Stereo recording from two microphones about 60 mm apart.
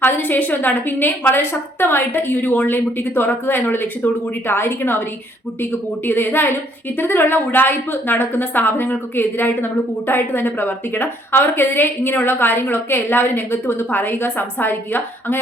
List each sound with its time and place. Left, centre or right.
0.0 s a woman's voice: left
6.1 s a woman's voice: left